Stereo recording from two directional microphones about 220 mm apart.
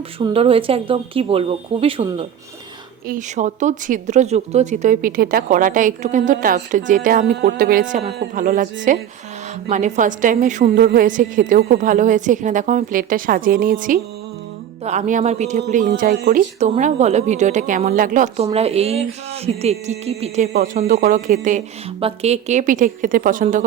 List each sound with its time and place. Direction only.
0.2 s a woman's voice: 25° right (ahead or behind)
15.9 s speech: 45° right (ahead or behind)
16.6 s a woman's voice: 30° right (ahead or behind)